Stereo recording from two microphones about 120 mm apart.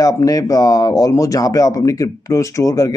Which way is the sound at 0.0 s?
30° left (ahead or behind).